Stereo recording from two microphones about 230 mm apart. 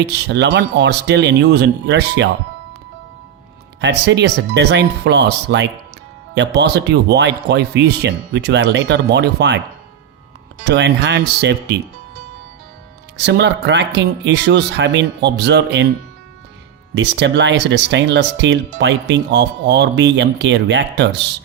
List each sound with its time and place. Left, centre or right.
0.0 s speech: right
3.8 s speech: right
10.6 s speech: right
13.1 s speech: right
16.9 s speech: right